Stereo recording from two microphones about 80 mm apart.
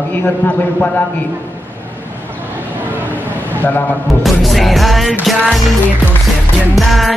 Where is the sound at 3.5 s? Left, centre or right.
Left.